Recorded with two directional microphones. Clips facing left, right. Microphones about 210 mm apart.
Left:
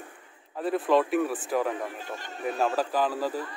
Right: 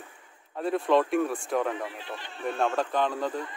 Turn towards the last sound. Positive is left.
turn(degrees=5)  # may be behind; listen again after turning